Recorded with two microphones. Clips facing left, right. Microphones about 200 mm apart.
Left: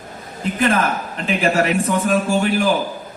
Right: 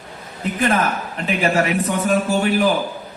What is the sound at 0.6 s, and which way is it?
A man's voice, 50° left (ahead or behind).